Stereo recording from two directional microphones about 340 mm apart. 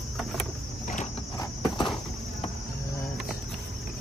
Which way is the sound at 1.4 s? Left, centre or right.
Centre.